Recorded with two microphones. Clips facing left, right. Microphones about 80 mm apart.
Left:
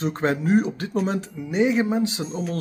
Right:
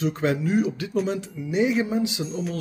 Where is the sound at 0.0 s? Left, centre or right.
Left.